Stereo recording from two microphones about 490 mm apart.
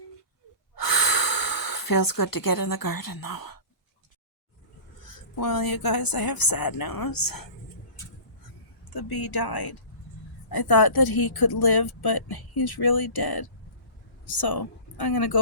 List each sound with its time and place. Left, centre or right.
0.8 s gasp: left
5.0 s a woman's voice: left
8.8 s a sound: left
9.3 s a woman's voice: left